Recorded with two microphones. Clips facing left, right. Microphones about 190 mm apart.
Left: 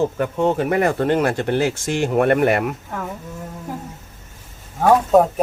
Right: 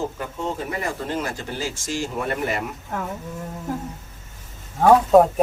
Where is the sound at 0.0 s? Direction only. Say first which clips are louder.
Left 9 dB; 65° left (ahead or behind).